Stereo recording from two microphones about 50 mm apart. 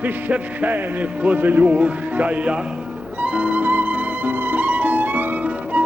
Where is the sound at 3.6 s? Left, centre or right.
Right.